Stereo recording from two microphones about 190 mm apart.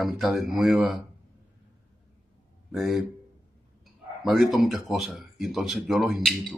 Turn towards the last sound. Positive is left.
turn(degrees=0)  # may be behind; listen again after turning